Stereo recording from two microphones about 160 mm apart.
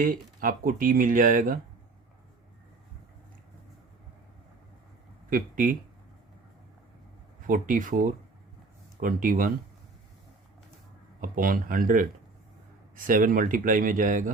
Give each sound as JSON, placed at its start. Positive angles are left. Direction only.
{"t": 0.0, "sound": "speech", "side_deg": -60}
{"t": 5.3, "sound": "speech", "side_deg": -55}
{"t": 7.4, "sound": "speech", "side_deg": -55}
{"t": 11.2, "sound": "speech", "side_deg": -60}